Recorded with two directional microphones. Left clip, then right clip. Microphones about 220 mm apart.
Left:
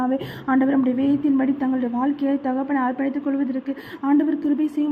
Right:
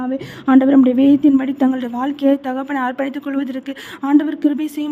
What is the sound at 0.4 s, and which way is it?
A woman's voice, 35° right (ahead or behind).